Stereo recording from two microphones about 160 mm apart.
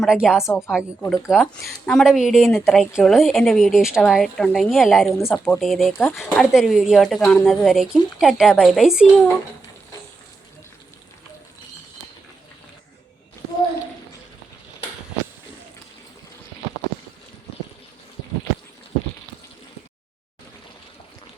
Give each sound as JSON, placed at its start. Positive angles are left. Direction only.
{"t": 0.0, "sound": "speech", "side_deg": -5}
{"t": 5.2, "sound": "speech", "side_deg": 10}
{"t": 5.5, "sound": "speech", "side_deg": 0}